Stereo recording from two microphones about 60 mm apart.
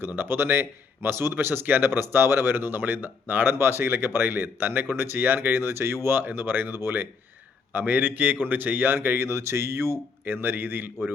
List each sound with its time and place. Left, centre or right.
0.0 s speech: right
10.2 s speech: right